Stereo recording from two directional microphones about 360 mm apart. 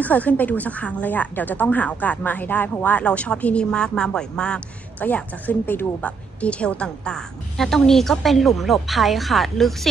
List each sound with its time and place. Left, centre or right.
0.0 s a woman's voice: centre